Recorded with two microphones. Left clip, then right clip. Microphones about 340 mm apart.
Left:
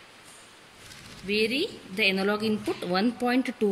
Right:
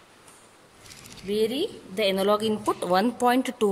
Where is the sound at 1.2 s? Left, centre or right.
Right.